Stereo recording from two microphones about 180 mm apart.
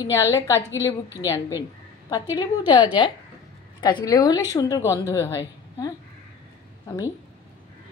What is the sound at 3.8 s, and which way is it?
A woman's voice, 20° left (ahead or behind).